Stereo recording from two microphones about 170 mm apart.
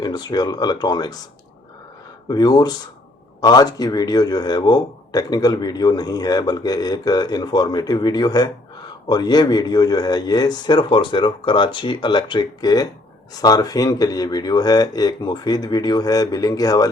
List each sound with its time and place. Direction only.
0.0 s a man's voice: 25° left (ahead or behind)
2.3 s a man's voice: 25° left (ahead or behind)